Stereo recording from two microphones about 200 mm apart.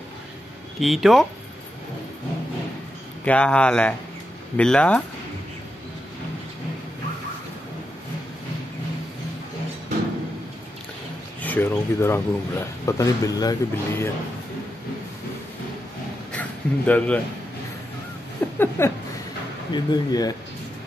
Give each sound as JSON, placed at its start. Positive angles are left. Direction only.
{"t": 0.7, "sound": "speech", "side_deg": 0}
{"t": 3.3, "sound": "speech", "side_deg": 5}
{"t": 11.4, "sound": "speech", "side_deg": 10}
{"t": 16.3, "sound": "a sound", "side_deg": 5}
{"t": 18.4, "sound": "a sound", "side_deg": 10}
{"t": 18.8, "sound": "speech", "side_deg": 10}